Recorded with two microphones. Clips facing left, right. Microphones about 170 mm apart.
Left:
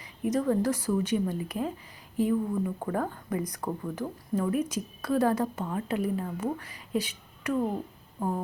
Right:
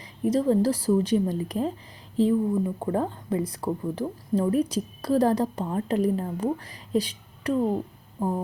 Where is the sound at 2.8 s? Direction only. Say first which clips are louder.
Right 4 dB; 25° right (ahead or behind).